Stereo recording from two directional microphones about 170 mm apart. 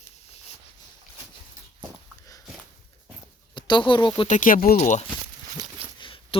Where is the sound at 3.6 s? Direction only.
30° left (ahead or behind).